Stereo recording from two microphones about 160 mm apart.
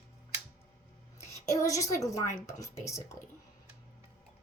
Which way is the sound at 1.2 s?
20° left (ahead or behind).